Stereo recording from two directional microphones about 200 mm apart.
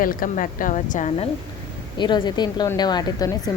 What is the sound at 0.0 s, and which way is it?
A woman's voice, 45° left (ahead or behind).